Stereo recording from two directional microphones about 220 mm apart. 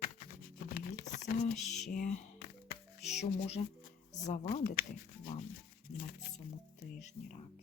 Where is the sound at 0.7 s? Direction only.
35° left (ahead or behind).